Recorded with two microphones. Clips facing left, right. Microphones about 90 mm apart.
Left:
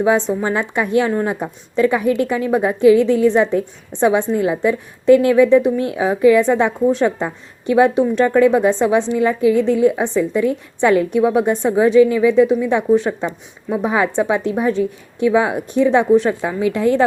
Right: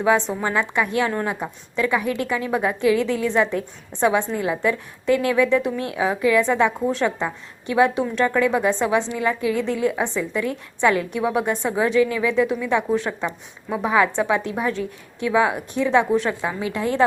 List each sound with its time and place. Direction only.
0.4 s a woman's voice: 25° left (ahead or behind)